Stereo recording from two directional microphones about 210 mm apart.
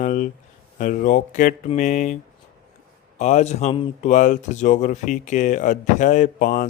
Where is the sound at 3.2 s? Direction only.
35° left (ahead or behind).